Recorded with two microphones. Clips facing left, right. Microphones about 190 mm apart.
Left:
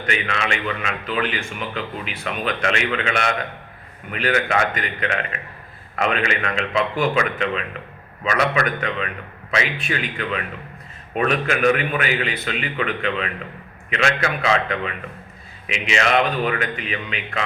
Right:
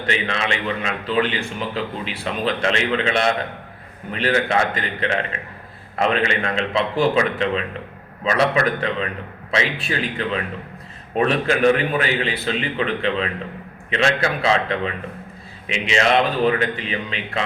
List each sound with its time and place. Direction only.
0.0 s a man's voice: 30° right (ahead or behind)